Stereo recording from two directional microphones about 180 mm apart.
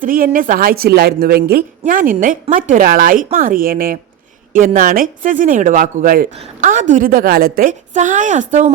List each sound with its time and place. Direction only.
0.0 s a woman's voice: 50° right (ahead or behind)
1.8 s a woman's voice: 50° right (ahead or behind)
6.3 s a woman's voice: 40° right (ahead or behind)